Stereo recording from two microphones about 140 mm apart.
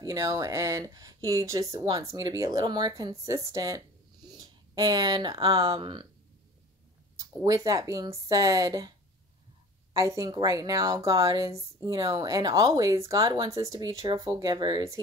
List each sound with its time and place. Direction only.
0.0 s speech: 25° right (ahead or behind)
7.2 s speech: 25° right (ahead or behind)
9.9 s speech: 25° right (ahead or behind)